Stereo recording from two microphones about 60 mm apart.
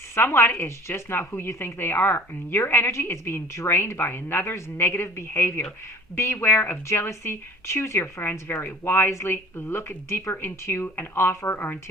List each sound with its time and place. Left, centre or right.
0.2 s a woman's voice: left